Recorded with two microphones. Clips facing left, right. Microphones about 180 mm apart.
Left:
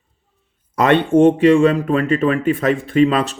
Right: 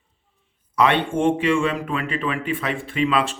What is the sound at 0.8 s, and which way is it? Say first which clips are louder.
Speech: left 7 dB; 45° left (ahead or behind).